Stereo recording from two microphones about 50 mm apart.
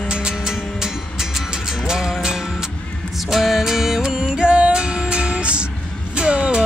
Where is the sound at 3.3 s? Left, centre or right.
Centre; by 6.6 s right.